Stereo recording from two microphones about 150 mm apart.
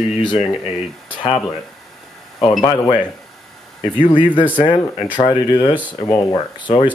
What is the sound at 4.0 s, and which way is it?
Speech, 30° left (ahead or behind).